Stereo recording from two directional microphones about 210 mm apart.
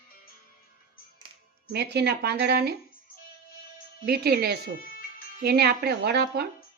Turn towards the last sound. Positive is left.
turn(degrees=-50)  # may be behind; listen again after turning